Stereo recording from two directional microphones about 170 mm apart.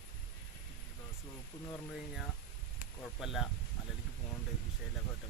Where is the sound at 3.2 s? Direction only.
Centre (ahead or behind).